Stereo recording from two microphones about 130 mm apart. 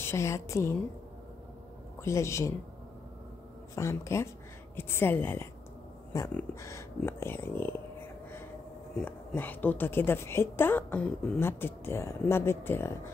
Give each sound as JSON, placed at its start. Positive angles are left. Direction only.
{"t": 0.0, "sound": "a woman's voice", "side_deg": 20}
{"t": 2.0, "sound": "a woman's voice", "side_deg": 20}
{"t": 3.7, "sound": "a woman's voice", "side_deg": 20}
{"t": 8.9, "sound": "a woman's voice", "side_deg": 15}